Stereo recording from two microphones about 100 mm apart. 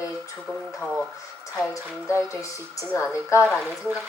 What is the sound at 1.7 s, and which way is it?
A child's voice, 30° left (ahead or behind).